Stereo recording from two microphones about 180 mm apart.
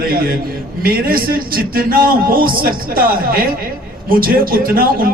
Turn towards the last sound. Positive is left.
turn(degrees=-55)  # may be behind; listen again after turning